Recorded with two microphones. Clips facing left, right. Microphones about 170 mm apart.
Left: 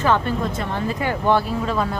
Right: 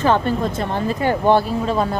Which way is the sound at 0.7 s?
30° right (ahead or behind).